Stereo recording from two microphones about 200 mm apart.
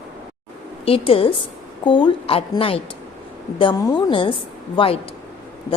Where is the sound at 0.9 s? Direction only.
30° left (ahead or behind).